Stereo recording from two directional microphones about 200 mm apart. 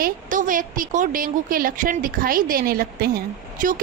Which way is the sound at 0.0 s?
40° right (ahead or behind).